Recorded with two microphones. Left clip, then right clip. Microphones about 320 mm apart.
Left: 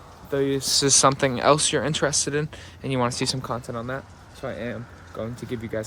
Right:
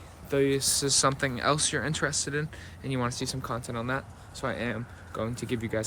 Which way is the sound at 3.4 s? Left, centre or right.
Centre.